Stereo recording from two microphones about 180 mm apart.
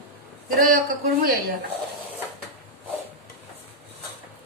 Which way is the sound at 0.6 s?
50° right (ahead or behind).